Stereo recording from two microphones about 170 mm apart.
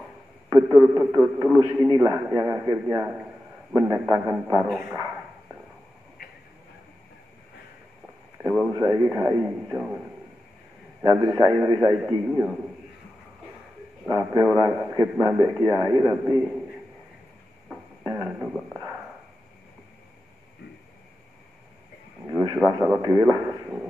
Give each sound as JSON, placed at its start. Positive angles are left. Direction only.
{"t": 0.7, "sound": "a man's voice", "side_deg": -10}
{"t": 8.6, "sound": "speech", "side_deg": -15}
{"t": 11.0, "sound": "a man's voice", "side_deg": -20}
{"t": 14.0, "sound": "a man's voice", "side_deg": -20}
{"t": 17.6, "sound": "a sound", "side_deg": -15}
{"t": 22.2, "sound": "a sound", "side_deg": -20}
{"t": 22.7, "sound": "speech", "side_deg": -15}